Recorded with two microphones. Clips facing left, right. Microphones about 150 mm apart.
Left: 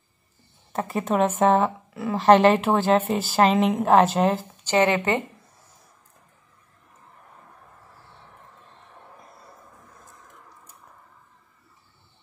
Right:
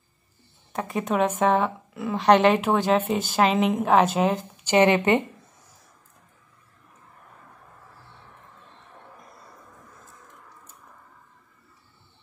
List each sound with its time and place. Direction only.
0.7 s a woman's voice: centre (ahead or behind)
4.6 s speech: 20° right (ahead or behind)